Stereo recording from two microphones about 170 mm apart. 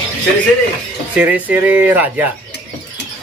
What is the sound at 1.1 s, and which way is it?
Speech, 10° right (ahead or behind).